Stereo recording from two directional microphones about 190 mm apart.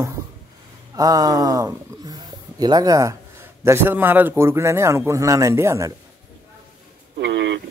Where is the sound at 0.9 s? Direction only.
20° right (ahead or behind).